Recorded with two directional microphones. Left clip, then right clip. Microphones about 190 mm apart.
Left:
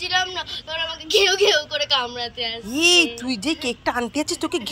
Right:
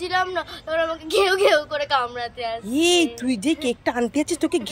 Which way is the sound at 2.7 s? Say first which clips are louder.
Left 3 dB; 15° left (ahead or behind).